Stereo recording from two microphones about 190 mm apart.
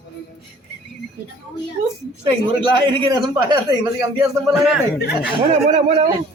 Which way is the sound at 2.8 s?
25° right (ahead or behind).